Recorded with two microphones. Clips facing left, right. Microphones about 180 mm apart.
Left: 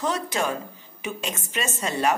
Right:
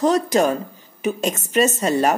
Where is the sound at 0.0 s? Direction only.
40° right (ahead or behind).